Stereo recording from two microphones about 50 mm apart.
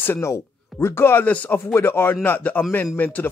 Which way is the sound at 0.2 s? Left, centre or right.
Left.